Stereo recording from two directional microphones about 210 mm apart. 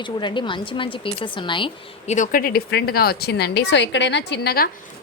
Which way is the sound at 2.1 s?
40° left (ahead or behind).